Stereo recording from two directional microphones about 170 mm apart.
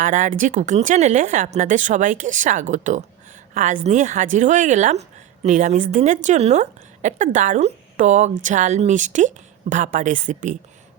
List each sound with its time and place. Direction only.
0.0 s a woman's voice: 50° right (ahead or behind)